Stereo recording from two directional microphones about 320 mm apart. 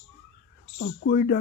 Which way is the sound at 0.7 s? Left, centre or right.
Left.